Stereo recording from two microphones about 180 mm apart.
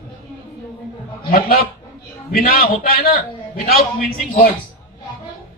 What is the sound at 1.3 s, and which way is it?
A man's voice, 55° left (ahead or behind).